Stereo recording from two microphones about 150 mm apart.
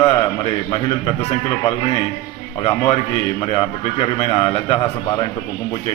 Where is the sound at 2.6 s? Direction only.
35° left (ahead or behind).